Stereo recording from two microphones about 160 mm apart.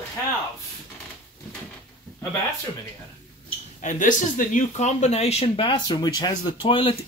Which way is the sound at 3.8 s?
55° left (ahead or behind).